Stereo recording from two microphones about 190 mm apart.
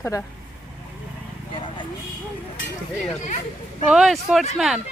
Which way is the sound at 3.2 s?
40° left (ahead or behind).